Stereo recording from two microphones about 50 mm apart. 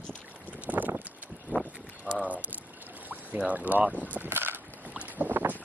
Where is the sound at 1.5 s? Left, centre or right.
Left.